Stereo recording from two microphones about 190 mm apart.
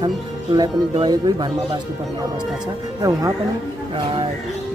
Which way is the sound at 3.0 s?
20° right (ahead or behind).